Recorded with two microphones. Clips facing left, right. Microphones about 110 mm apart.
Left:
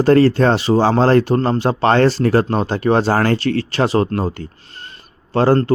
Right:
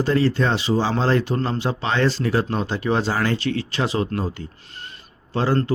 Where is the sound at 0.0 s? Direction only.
55° left (ahead or behind).